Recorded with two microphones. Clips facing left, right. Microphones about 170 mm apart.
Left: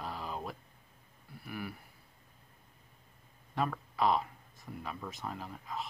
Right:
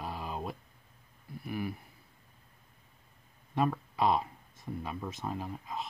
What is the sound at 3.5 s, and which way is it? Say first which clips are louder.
Speech: right 4 dB; 20° right (ahead or behind).